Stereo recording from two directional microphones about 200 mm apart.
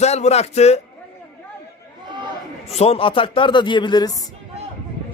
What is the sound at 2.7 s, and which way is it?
A man's voice, 30° left (ahead or behind).